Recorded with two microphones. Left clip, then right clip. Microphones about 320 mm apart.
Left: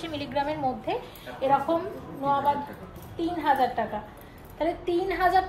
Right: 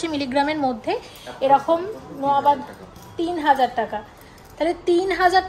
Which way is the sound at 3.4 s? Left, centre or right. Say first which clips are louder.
Right 6 dB; right.